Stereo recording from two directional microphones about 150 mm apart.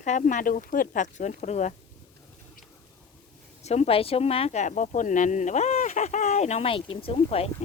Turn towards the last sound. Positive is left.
turn(degrees=40)  # may be behind; listen again after turning